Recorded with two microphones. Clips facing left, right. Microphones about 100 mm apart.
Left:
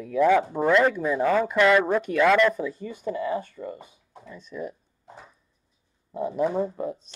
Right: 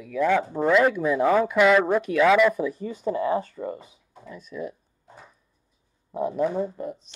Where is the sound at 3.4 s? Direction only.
40° right (ahead or behind).